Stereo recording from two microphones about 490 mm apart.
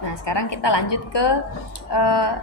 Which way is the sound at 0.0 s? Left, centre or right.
Left.